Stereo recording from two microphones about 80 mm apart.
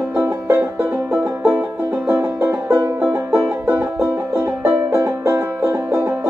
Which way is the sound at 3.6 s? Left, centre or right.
Right.